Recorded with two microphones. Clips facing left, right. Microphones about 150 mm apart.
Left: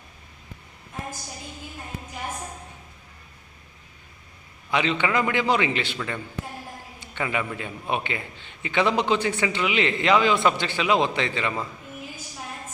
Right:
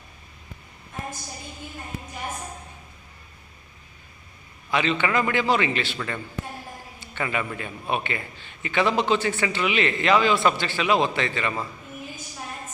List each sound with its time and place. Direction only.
4.7 s a man's voice: 15° left (ahead or behind)
7.0 s a man's voice: 15° left (ahead or behind)